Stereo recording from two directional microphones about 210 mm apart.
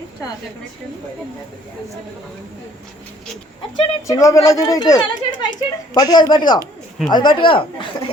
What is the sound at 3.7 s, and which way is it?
A woman's voice, 15° left (ahead or behind).